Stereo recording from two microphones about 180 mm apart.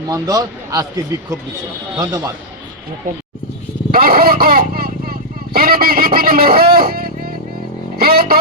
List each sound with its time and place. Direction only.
0.1 s speech: 20° right (ahead or behind)
3.9 s speech: 55° right (ahead or behind)